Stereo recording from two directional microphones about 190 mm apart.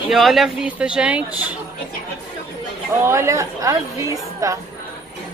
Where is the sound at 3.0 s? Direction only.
15° right (ahead or behind).